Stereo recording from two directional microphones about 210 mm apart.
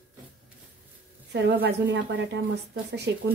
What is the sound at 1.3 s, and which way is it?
A woman's voice, 55° right (ahead or behind).